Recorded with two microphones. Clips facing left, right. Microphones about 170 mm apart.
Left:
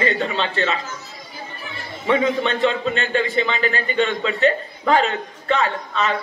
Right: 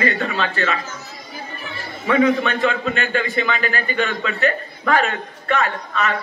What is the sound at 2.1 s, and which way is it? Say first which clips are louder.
A man's voice: right 2 dB; 25° left (ahead or behind).